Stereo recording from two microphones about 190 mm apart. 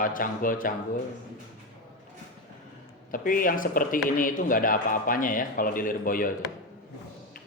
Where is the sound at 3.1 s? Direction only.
45° left (ahead or behind).